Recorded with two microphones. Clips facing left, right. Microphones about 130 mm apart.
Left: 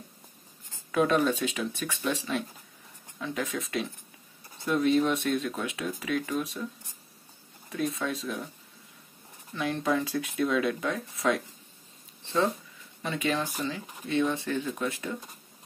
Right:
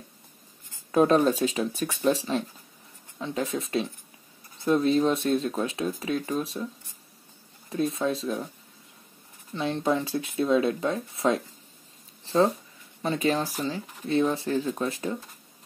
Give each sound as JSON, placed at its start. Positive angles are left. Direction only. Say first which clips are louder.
{"t": 0.9, "sound": "speech", "louder": "right 4 dB", "side_deg": -35}
{"t": 7.7, "sound": "speech", "louder": "right 4 dB", "side_deg": -30}
{"t": 9.5, "sound": "speech", "louder": "right 2 dB", "side_deg": -30}